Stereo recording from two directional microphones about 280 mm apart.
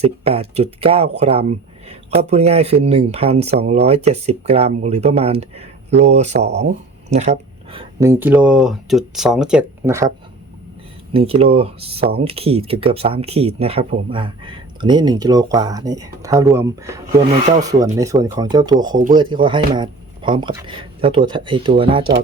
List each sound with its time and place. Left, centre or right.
0.0 s speech: right
11.1 s speech: right